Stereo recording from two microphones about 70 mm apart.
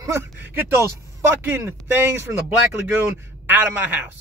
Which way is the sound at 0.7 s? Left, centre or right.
Right.